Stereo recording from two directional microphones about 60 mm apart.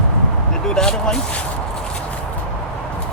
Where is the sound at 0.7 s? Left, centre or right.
Centre.